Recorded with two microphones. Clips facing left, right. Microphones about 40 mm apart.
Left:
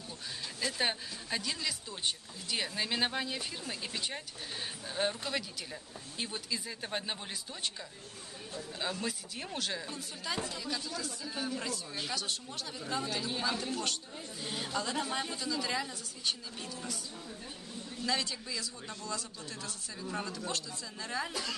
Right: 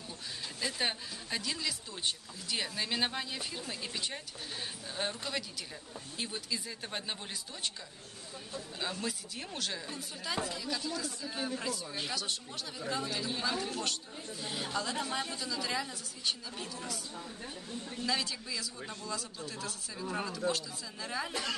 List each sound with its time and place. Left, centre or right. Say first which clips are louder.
0.6 s speech: left 1 dB; centre
8.5 s speech: left 1 dB; centre
18.0 s speech: left 1 dB; centre
20.1 s speech: right 4 dB; centre
21.3 s a woman's voice: right 2 dB; right